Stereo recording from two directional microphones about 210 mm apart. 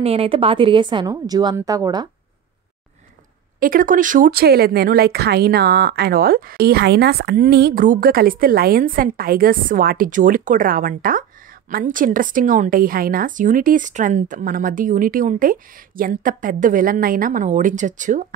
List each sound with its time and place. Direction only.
0.0 s a woman's voice: 30° right (ahead or behind)
3.5 s a woman's voice: 40° right (ahead or behind)